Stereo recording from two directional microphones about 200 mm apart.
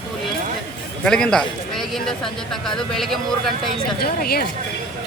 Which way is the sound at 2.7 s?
Centre (ahead or behind).